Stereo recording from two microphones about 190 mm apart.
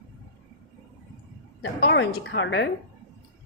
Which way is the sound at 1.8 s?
70° left (ahead or behind).